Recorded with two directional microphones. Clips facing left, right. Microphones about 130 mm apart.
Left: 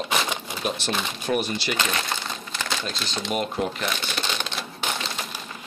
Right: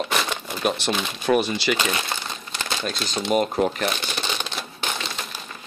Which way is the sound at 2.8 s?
45° right (ahead or behind).